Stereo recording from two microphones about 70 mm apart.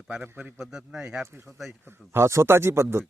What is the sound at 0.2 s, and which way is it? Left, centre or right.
Speech, centre.